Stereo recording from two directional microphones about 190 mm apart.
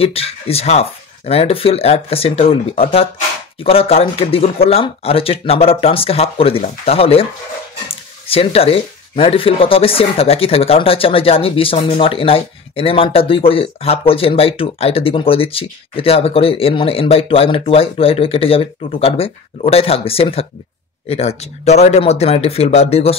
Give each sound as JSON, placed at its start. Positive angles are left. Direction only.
{"t": 0.0, "sound": "speech", "side_deg": 30}